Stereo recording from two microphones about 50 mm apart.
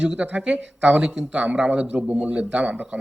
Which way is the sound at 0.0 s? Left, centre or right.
Right.